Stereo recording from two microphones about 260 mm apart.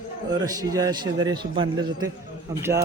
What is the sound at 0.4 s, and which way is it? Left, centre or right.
A man's voice, centre.